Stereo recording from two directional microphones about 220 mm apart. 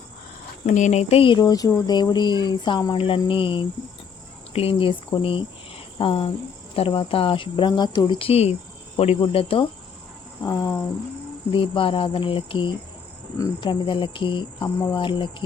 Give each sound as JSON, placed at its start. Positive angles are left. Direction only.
{"t": 0.6, "sound": "speech", "side_deg": 35}
{"t": 10.4, "sound": "cricket", "side_deg": 15}
{"t": 11.5, "sound": "speech", "side_deg": 25}